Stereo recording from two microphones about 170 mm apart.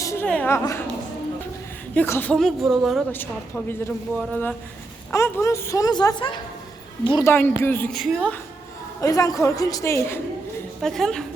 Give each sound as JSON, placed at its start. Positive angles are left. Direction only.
{"t": 0.0, "sound": "a sound", "side_deg": 15}
{"t": 0.3, "sound": "a woman's voice", "side_deg": 10}
{"t": 2.0, "sound": "speech", "side_deg": 10}
{"t": 3.1, "sound": "speech", "side_deg": 10}
{"t": 7.6, "sound": "speech", "side_deg": 10}
{"t": 9.0, "sound": "speech", "side_deg": 20}
{"t": 10.8, "sound": "speech", "side_deg": 0}